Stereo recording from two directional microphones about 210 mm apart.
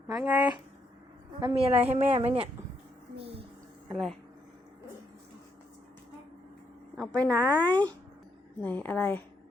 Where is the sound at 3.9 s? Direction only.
Centre (ahead or behind).